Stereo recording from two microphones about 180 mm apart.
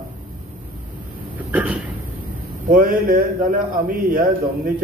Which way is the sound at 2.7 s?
50° right (ahead or behind).